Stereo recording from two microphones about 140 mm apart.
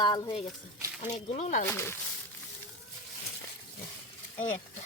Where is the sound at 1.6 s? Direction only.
15° left (ahead or behind).